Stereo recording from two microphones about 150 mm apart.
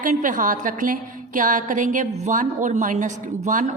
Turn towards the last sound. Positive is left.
turn(degrees=-60)  # may be behind; listen again after turning